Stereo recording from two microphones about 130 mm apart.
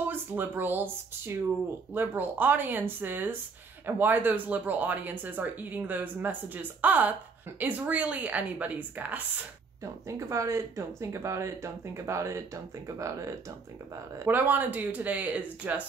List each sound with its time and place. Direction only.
0.1 s speech: 15° right (ahead or behind)
10.0 s speech: 25° right (ahead or behind)